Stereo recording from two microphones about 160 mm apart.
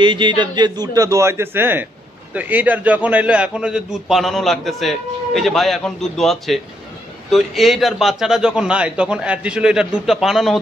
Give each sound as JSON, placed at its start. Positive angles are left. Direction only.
{"t": 0.0, "sound": "a man's voice", "side_deg": -30}